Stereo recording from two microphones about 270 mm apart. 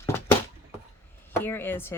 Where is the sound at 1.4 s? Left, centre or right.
Centre.